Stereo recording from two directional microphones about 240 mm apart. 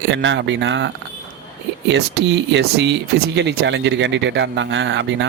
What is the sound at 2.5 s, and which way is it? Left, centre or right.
Speech, right.